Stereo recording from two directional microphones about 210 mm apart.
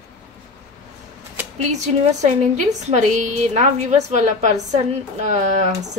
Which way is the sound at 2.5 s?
35° right (ahead or behind).